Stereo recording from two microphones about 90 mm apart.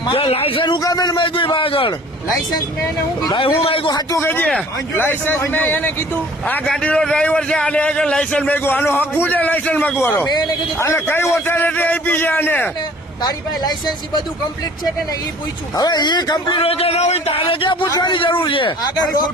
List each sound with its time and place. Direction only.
0.1 s a man's voice: 90° left; by 0.8 s 75° left (ahead or behind)
0.8 s a man's voice: 45° left (ahead or behind); by 1.9 s 90° left
3.4 s a man's voice: 90° left
4.2 s a man's voice: 20° left (ahead or behind)
6.7 s a man's voice: 10° left (ahead or behind)
13.2 s speech: 50° left (ahead or behind)
15.7 s speech: 50° left (ahead or behind)
16.6 s a man's voice: 90° left
17.8 s speech: 45° left (ahead or behind)
18.1 s a man's voice: 75° left (ahead or behind)